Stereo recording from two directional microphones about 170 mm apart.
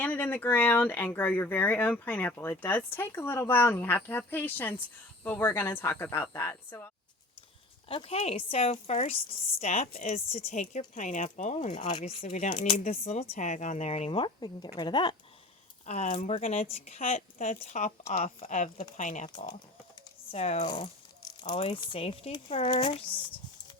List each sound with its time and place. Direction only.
0.0 s speech: 10° left (ahead or behind)
7.9 s a woman's voice: 35° left (ahead or behind)
11.7 s a woman's voice: 30° left (ahead or behind)
15.9 s speech: 40° left (ahead or behind)
20.3 s a woman's voice: 40° left (ahead or behind)
20.7 s a woman's voice: 30° left (ahead or behind)